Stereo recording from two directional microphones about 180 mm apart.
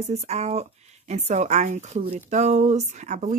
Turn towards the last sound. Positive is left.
turn(degrees=-40)  # may be behind; listen again after turning